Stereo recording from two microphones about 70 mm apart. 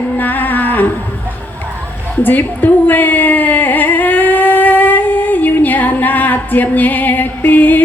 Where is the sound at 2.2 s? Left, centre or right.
Left.